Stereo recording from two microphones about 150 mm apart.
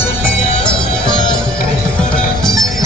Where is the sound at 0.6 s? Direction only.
5° left (ahead or behind).